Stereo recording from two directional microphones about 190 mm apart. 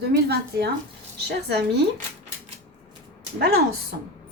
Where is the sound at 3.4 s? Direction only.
60° right (ahead or behind).